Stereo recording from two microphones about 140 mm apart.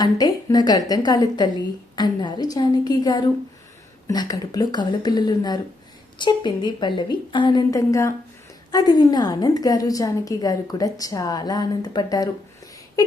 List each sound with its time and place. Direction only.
0.0 s a woman's voice: 30° left (ahead or behind)